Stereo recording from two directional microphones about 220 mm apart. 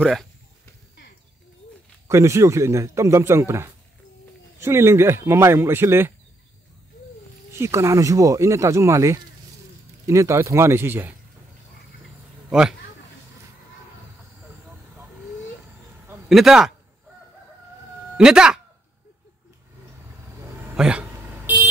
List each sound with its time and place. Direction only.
0.0 s speech: centre (ahead or behind)
2.0 s a man's voice: 15° right (ahead or behind)
7.5 s a man's voice: 10° right (ahead or behind)
12.4 s speech: 5° right (ahead or behind)
14.7 s vehicle: 5° right (ahead or behind)
16.1 s a man's voice: centre (ahead or behind)
18.1 s speech: 5° right (ahead or behind)
20.7 s vehicle: 5° right (ahead or behind)